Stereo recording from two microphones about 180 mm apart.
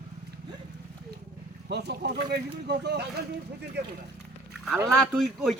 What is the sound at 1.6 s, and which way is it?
Speech, 70° right (ahead or behind).